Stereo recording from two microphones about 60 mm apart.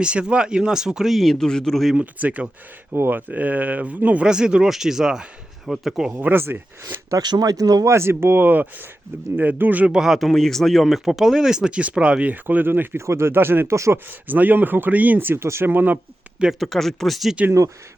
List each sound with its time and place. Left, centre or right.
0.0 s speech: centre
1.1 s speech: centre
2.0 s speech: right
2.9 s speech: right
4.3 s speech: centre
6.1 s speech: right
7.1 s speech: right
7.9 s speech: right
9.9 s speech: centre; by 13.0 s right
13.0 s speech: right
13.7 s speech: right
14.1 s speech: right
15.4 s speech: right
16.6 s speech: centre